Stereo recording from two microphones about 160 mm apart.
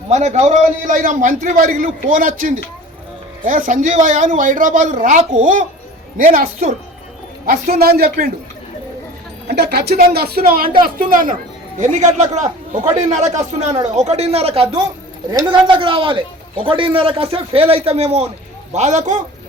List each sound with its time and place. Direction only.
0.1 s a man's voice: 45° right (ahead or behind); by 8.3 s 70° right (ahead or behind)
9.5 s a woman's voice: 85° right; by 11.3 s 60° right (ahead or behind)
11.8 s a man's voice: 50° right (ahead or behind)
15.3 s a man's voice: 25° right (ahead or behind); by 19.2 s 50° right (ahead or behind)